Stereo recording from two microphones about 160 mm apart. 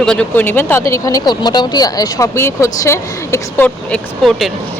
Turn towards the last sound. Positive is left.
turn(degrees=5)  # may be behind; listen again after turning